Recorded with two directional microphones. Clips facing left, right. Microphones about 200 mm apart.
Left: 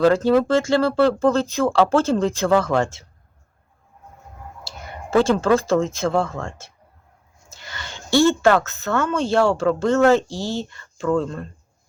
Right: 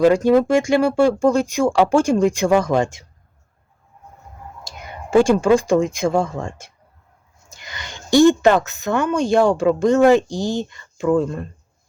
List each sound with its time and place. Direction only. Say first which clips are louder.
0.0 s a woman's voice: right 2 dB; 15° right (ahead or behind)
5.1 s a woman's voice: right 3 dB; 15° right (ahead or behind)